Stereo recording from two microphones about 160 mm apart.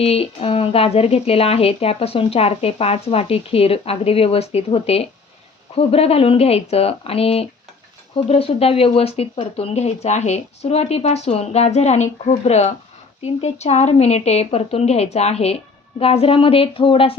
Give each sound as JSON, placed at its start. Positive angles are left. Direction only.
{"t": 0.0, "sound": "speech", "side_deg": 40}